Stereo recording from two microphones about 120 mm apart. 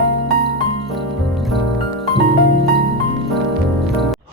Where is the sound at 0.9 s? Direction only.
Centre (ahead or behind).